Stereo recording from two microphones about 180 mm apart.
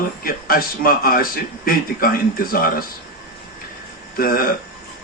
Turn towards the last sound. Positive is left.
turn(degrees=55)  # may be behind; listen again after turning